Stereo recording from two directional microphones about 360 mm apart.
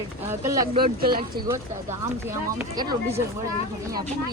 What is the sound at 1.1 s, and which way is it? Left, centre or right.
Speech, centre.